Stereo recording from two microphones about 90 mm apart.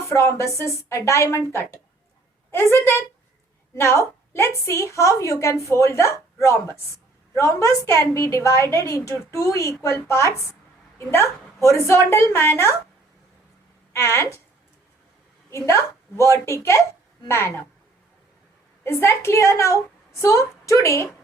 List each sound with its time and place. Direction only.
0.1 s a woman's voice: 30° left (ahead or behind)
2.5 s a woman's voice: 30° left (ahead or behind)
13.9 s a woman's voice: 30° left (ahead or behind)
15.4 s a woman's voice: 30° left (ahead or behind)
18.8 s a woman's voice: 25° left (ahead or behind)